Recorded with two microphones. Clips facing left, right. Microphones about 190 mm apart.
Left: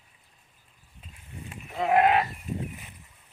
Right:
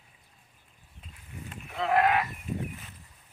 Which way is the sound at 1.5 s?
15° left (ahead or behind).